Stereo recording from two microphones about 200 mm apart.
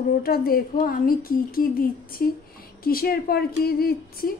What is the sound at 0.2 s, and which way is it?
A woman's voice, 50° left (ahead or behind).